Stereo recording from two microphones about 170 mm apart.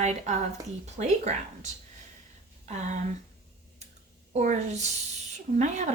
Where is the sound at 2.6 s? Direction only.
45° right (ahead or behind).